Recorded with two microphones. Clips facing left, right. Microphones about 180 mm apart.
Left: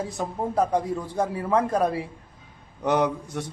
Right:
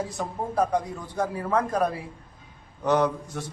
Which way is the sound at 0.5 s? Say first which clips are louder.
Left 1 dB; 25° left (ahead or behind).